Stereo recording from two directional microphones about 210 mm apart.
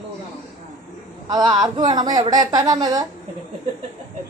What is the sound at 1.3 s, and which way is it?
A woman's voice, 20° right (ahead or behind).